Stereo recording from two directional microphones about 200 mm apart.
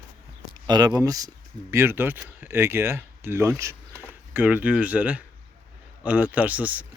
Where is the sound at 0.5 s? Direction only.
20° right (ahead or behind).